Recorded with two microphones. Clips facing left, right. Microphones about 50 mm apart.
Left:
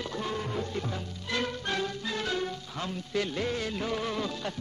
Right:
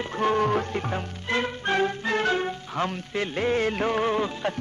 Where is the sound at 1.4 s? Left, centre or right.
Right.